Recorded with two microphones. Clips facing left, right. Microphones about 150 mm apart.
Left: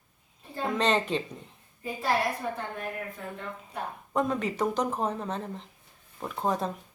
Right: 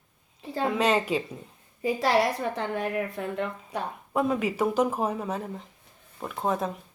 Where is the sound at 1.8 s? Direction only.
90° right.